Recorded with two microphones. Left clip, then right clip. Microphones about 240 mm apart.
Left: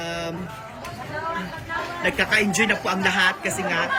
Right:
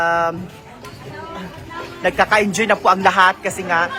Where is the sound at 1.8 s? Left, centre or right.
Centre.